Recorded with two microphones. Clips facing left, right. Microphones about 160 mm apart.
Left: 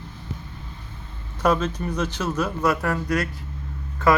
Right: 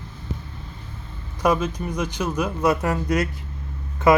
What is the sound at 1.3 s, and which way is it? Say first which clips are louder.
A man's voice: even; 10° right (ahead or behind).